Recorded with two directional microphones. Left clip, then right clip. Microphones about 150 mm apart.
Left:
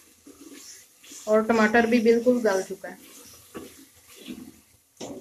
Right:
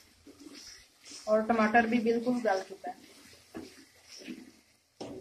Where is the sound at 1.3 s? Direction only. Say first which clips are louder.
Left 5 dB; 45° left (ahead or behind).